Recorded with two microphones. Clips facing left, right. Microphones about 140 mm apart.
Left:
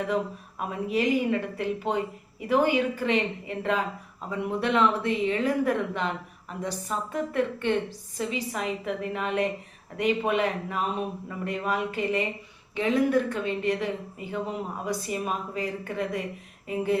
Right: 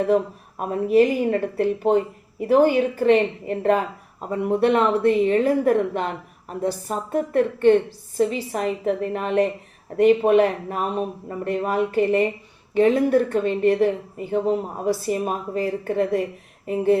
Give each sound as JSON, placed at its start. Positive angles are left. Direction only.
{"t": 0.6, "sound": "a woman's voice", "side_deg": -45}